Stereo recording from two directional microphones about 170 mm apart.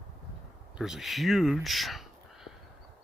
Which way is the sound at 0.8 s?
Centre (ahead or behind).